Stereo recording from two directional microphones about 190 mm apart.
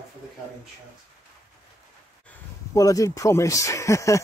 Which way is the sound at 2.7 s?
15° left (ahead or behind).